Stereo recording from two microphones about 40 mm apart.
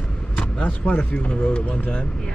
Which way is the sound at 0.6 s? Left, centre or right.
Left.